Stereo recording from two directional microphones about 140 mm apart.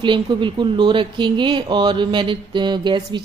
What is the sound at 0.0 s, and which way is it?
Speech, 35° right (ahead or behind).